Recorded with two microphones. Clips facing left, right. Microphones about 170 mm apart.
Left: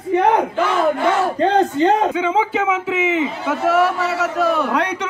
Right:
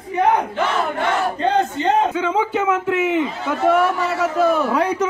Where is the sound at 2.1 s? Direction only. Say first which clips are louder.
Left 1 dB; 10° left (ahead or behind).